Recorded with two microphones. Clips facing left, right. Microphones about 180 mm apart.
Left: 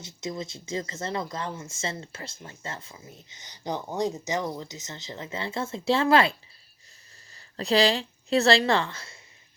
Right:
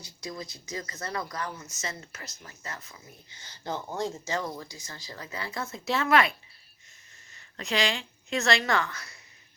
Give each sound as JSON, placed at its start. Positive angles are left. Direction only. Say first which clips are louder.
{"t": 0.0, "sound": "speech", "louder": "left 5 dB", "side_deg": 25}
{"t": 7.3, "sound": "a woman's voice", "louder": "left 7 dB", "side_deg": 35}